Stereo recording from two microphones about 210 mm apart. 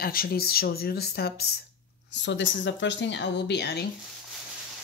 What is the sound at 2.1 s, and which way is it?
Speech, 60° left (ahead or behind).